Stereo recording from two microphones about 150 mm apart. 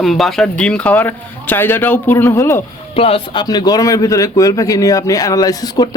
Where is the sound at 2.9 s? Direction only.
40° left (ahead or behind).